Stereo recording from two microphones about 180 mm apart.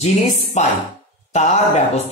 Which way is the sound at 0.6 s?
40° left (ahead or behind).